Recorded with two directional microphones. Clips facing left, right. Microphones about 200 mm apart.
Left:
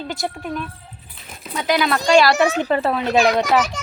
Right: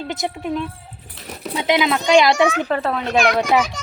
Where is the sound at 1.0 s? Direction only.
75° right (ahead or behind).